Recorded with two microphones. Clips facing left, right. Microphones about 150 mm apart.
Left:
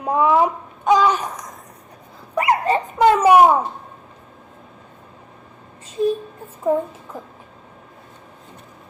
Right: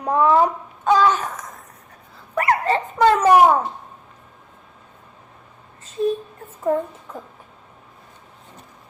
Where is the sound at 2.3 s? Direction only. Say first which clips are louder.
Left 1 dB; 15° left (ahead or behind).